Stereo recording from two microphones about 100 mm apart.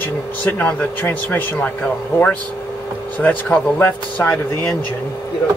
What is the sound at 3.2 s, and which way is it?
Speech, 20° left (ahead or behind).